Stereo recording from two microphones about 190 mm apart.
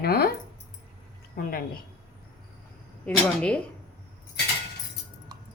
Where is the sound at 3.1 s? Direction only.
5° left (ahead or behind).